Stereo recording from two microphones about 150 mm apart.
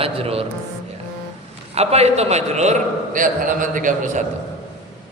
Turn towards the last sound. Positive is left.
turn(degrees=-60)  # may be behind; listen again after turning